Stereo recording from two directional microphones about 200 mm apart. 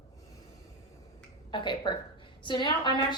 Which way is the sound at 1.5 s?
20° left (ahead or behind).